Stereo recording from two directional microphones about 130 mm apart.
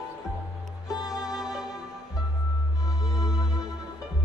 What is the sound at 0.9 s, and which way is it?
Music, 30° left (ahead or behind).